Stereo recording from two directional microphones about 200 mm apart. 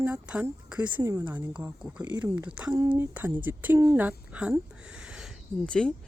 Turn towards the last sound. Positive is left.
turn(degrees=5)  # may be behind; listen again after turning